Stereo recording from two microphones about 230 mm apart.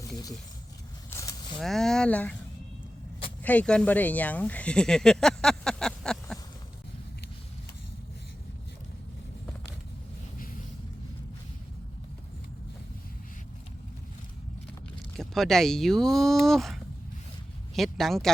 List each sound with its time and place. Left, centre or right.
1.1 s zipper: centre
1.5 s speech: centre
3.4 s speech: centre
15.2 s speech: centre